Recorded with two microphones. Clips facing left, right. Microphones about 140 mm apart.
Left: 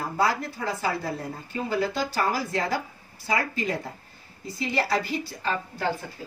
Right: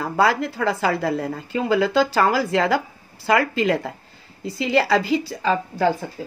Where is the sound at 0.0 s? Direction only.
90° right.